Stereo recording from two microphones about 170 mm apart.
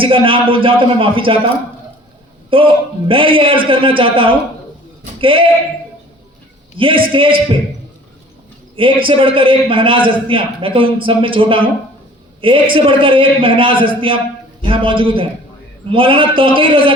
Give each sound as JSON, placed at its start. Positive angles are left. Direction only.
{"t": 0.0, "sound": "a man's voice", "side_deg": -30}
{"t": 2.5, "sound": "a man's voice", "side_deg": -30}
{"t": 6.7, "sound": "a man's voice", "side_deg": -30}
{"t": 8.7, "sound": "a man's voice", "side_deg": -30}